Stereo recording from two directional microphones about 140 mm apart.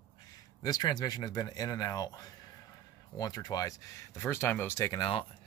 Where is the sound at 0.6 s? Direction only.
30° left (ahead or behind).